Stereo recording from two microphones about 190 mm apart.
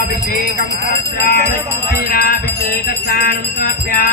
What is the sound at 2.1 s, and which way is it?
Music, 50° left (ahead or behind).